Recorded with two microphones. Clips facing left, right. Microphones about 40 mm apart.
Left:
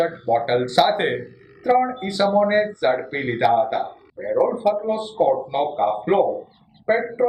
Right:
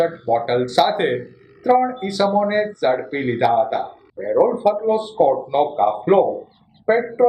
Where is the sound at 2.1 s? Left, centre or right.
Centre.